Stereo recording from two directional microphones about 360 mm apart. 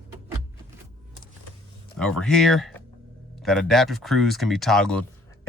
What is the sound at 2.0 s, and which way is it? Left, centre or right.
Speech, centre.